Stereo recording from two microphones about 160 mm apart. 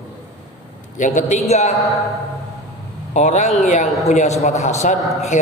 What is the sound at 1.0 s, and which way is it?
Speech, 50° left (ahead or behind).